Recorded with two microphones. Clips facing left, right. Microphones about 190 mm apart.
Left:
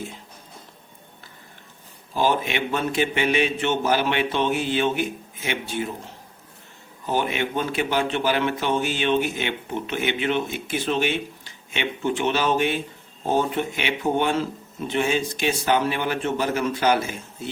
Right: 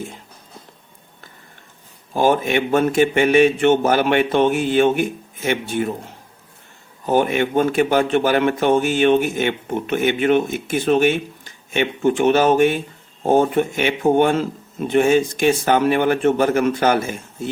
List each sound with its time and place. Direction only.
2.1 s a man's voice: 50° right (ahead or behind)
7.1 s a man's voice: 50° right (ahead or behind)